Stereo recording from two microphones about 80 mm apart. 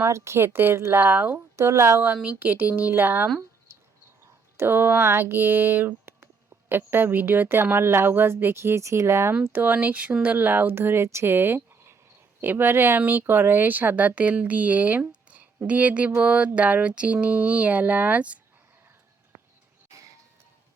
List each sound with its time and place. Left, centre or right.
0.0 s speech: right
1.5 s a woman's voice: right
2.2 s speech: right
4.5 s a woman's voice: right
9.4 s speech: right